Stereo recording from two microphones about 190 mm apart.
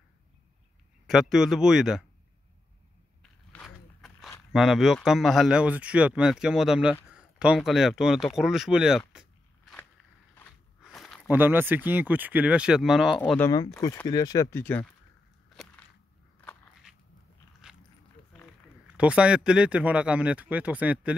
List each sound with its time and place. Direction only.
1.0 s speech: centre (ahead or behind)
3.2 s a sound: 5° left (ahead or behind)
4.5 s speech: centre (ahead or behind)
10.8 s a sound: centre (ahead or behind)
11.2 s speech: 10° right (ahead or behind)
13.2 s speech: 10° left (ahead or behind)
15.5 s a sound: centre (ahead or behind)
17.6 s biting: 5° right (ahead or behind)
18.9 s speech: 5° right (ahead or behind)